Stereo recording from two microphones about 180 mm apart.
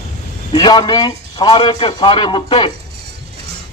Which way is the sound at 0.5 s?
25° left (ahead or behind).